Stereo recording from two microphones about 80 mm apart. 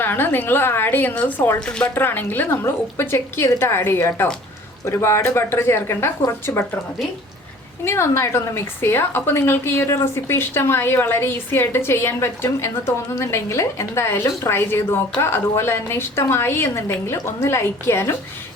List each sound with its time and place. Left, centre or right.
0.0 s a woman's voice: left
7.9 s a woman's voice: left